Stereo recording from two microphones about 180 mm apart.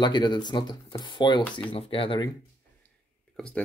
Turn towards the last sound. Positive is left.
turn(degrees=5)  # may be behind; listen again after turning